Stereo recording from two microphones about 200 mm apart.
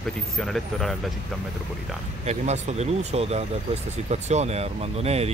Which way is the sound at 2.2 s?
35° right (ahead or behind).